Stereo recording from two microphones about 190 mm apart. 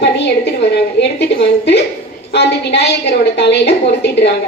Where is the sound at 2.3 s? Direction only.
60° left (ahead or behind).